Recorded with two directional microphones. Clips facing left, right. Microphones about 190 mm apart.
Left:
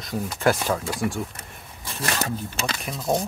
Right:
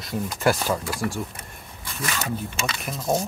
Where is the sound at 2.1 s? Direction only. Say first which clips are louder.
Left 2 dB; 40° left (ahead or behind).